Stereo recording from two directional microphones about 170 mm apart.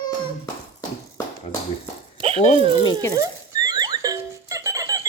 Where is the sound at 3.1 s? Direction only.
20° right (ahead or behind).